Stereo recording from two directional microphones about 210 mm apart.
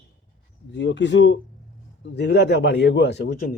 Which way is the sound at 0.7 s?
55° left (ahead or behind).